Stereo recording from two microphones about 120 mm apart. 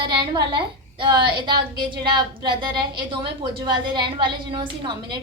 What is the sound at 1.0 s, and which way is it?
A woman's voice, 40° right (ahead or behind).